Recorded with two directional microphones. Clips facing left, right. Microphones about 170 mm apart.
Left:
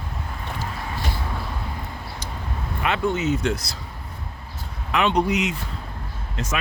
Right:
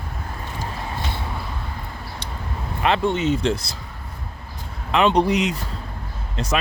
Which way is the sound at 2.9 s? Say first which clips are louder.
Right 3 dB; 30° right (ahead or behind).